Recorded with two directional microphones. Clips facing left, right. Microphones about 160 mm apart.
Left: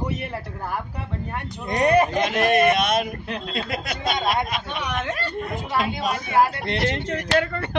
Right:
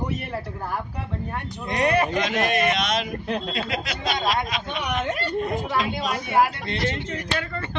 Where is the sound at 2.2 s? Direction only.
55° left (ahead or behind).